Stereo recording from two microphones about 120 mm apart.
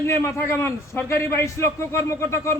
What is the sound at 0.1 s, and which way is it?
A man's voice, 25° left (ahead or behind).